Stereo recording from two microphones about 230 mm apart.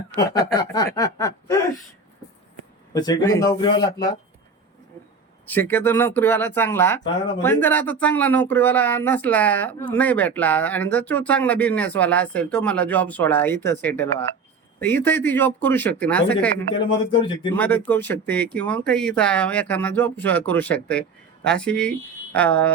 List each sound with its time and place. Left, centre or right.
0.2 s speech: centre
2.9 s speech: centre
5.5 s speech: centre
17.2 s speech: centre
17.5 s speech: centre